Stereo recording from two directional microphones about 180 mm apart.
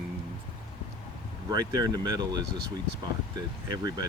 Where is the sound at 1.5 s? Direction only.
20° right (ahead or behind).